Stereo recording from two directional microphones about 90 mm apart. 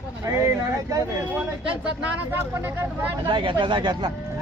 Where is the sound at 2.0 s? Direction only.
25° right (ahead or behind).